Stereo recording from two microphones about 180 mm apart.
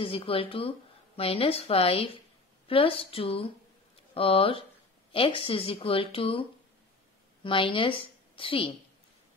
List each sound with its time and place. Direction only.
0.0 s speech: 30° left (ahead or behind)
7.4 s a woman's voice: 30° left (ahead or behind)